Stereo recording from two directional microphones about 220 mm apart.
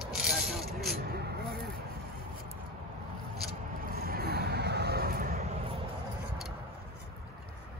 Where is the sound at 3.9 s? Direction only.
45° right (ahead or behind).